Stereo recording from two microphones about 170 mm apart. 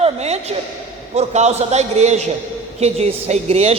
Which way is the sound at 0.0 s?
40° right (ahead or behind).